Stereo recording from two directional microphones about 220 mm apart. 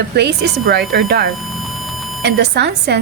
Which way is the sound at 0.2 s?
50° right (ahead or behind).